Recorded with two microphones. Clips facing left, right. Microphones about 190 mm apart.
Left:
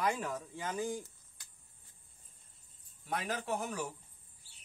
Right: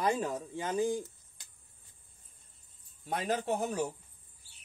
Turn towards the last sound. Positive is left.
turn(degrees=-25)  # may be behind; listen again after turning